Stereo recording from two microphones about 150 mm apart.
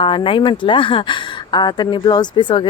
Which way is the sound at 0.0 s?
35° left (ahead or behind).